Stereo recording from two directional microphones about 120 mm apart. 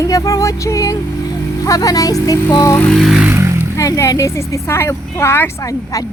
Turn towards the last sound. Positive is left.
turn(degrees=25)  # may be behind; listen again after turning